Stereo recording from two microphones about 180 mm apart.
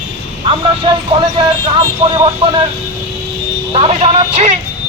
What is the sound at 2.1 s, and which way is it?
Speech, 25° right (ahead or behind).